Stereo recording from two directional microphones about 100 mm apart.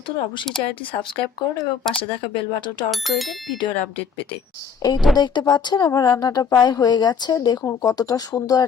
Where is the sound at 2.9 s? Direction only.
Centre (ahead or behind).